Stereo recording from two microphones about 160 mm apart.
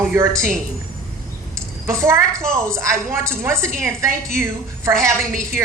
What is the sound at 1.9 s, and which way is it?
A woman's voice, 15° right (ahead or behind).